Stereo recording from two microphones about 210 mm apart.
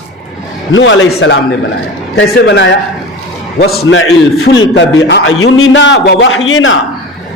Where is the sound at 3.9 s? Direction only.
75° left (ahead or behind); by 5.3 s 55° left (ahead or behind).